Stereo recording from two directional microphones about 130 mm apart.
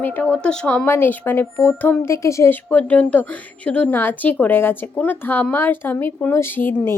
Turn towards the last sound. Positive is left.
turn(degrees=15)  # may be behind; listen again after turning